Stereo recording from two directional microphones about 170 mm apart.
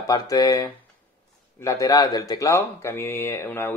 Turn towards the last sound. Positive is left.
turn(degrees=15)  # may be behind; listen again after turning